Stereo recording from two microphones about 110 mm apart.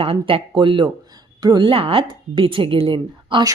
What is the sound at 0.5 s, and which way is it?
A woman's voice, 45° right (ahead or behind).